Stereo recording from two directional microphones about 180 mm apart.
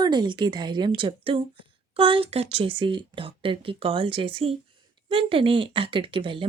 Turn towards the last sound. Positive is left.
turn(degrees=-30)  # may be behind; listen again after turning